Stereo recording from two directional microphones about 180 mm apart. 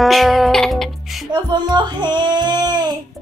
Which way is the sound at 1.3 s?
25° right (ahead or behind).